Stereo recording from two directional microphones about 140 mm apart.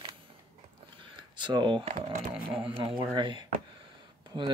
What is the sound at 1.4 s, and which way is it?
Speech, 30° right (ahead or behind).